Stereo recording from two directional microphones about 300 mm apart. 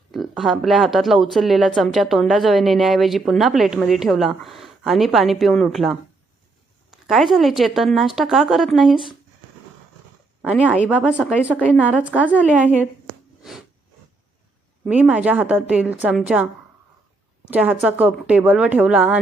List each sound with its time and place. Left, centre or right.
0.1 s speech: centre
10.4 s speech: centre
13.4 s a sound: centre
14.8 s speech: centre
17.5 s speech: centre